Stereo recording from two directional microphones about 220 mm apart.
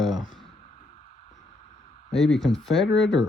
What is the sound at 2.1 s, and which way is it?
Speech, centre (ahead or behind).